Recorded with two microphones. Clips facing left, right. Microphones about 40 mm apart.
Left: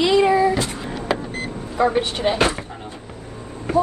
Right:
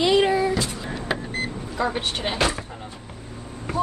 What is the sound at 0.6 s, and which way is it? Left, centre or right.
Music, left.